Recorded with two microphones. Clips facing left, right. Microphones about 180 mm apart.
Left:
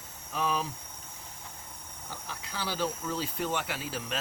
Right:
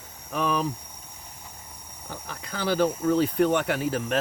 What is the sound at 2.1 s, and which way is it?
Speech, 60° right (ahead or behind).